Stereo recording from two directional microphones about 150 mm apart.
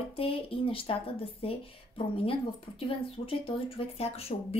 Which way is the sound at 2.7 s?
35° left (ahead or behind).